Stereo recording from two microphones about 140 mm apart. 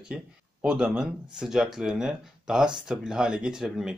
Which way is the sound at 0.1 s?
5° right (ahead or behind).